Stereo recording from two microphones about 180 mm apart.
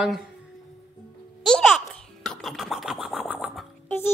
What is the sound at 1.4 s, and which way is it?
Speech, centre (ahead or behind).